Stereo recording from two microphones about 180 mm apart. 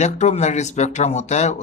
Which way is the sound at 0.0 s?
40° left (ahead or behind).